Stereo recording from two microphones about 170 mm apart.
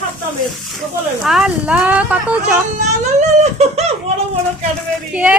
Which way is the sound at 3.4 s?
40° right (ahead or behind).